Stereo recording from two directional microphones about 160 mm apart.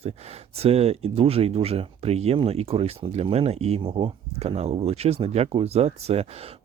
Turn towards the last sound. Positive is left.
turn(degrees=-40)  # may be behind; listen again after turning